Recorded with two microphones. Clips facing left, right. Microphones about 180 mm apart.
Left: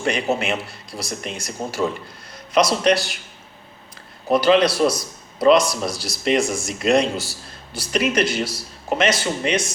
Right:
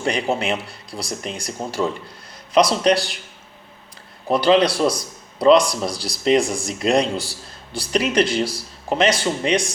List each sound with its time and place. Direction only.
0.0 s speech: 30° right (ahead or behind)
4.3 s speech: 30° right (ahead or behind)